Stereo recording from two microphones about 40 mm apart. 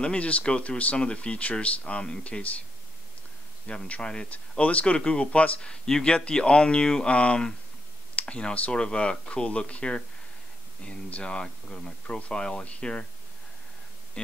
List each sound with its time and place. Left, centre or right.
0.0 s speech: left
3.6 s speech: left
4.3 s speech: left
4.9 s speech: left
7.1 s speech: left
14.2 s speech: left